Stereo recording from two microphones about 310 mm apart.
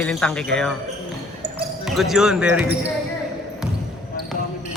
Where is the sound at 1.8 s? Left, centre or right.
Centre.